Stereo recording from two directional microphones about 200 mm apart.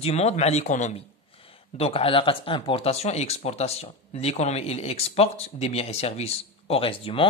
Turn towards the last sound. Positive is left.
turn(degrees=25)  # may be behind; listen again after turning